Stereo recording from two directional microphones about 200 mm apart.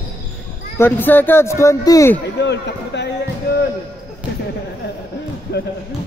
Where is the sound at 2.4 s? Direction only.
60° left (ahead or behind).